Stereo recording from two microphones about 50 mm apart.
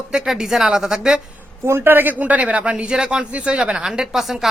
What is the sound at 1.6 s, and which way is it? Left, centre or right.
A man's voice, right.